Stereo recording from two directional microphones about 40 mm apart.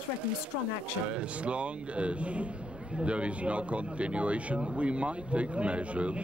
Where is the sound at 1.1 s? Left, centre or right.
Right.